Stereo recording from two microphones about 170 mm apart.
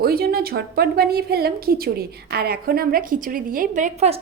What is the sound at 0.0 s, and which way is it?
A woman's voice, 65° right (ahead or behind).